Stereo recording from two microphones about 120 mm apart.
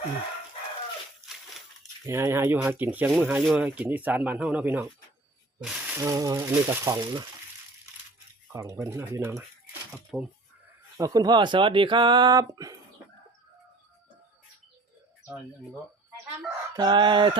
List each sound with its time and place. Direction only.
2.0 s speech: 20° right (ahead or behind)
5.6 s a sound: 10° right (ahead or behind)
6.0 s speech: 30° right (ahead or behind)
8.5 s speech: 25° right (ahead or behind)
9.9 s speech: 5° right (ahead or behind)
10.9 s speech: 30° right (ahead or behind)
16.7 s speech: 40° right (ahead or behind)